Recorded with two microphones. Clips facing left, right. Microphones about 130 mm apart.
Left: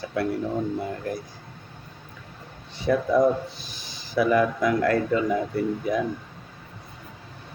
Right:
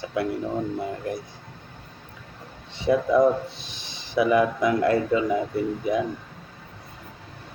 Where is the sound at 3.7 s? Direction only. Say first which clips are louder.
Right 1 dB; 25° right (ahead or behind).